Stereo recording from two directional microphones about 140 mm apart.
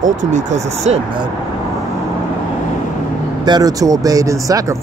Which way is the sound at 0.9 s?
50° right (ahead or behind).